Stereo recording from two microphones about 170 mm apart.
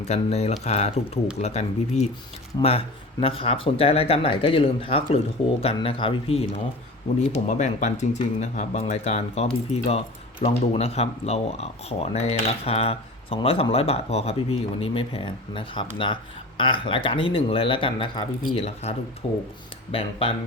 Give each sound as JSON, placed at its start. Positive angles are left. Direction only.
{"t": 0.1, "sound": "speech", "side_deg": 40}
{"t": 7.3, "sound": "speech", "side_deg": 45}